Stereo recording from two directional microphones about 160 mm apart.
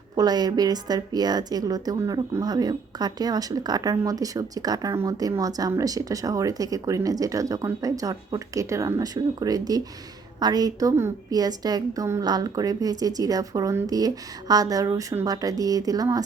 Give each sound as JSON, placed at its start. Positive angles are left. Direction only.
{"t": 0.2, "sound": "a woman's voice", "side_deg": -25}